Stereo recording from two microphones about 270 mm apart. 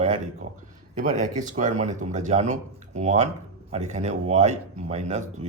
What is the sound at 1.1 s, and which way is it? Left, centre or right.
A man's voice, right.